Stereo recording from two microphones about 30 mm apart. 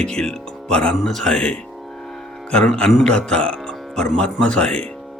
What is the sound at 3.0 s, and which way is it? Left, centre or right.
Speech, left.